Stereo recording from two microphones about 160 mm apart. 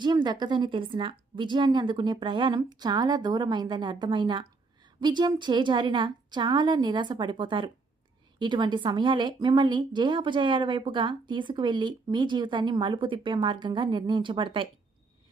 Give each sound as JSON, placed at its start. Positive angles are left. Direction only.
{"t": 0.0, "sound": "a woman's voice", "side_deg": -25}